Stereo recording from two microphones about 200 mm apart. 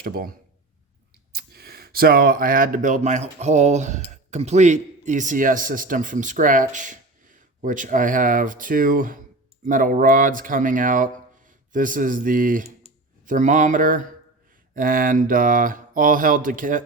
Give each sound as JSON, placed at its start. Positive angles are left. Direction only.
{"t": 0.0, "sound": "speech", "side_deg": -50}
{"t": 1.3, "sound": "speech", "side_deg": -50}
{"t": 9.6, "sound": "mantra", "side_deg": -40}
{"t": 12.8, "sound": "speech", "side_deg": -40}
{"t": 14.8, "sound": "mantra", "side_deg": -45}